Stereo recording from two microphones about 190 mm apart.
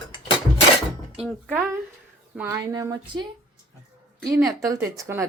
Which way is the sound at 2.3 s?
10° right (ahead or behind).